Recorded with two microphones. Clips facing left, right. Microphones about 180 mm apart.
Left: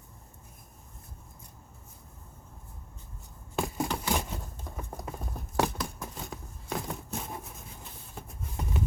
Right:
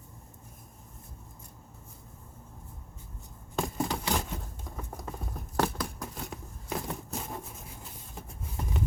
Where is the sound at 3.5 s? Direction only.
5° left (ahead or behind).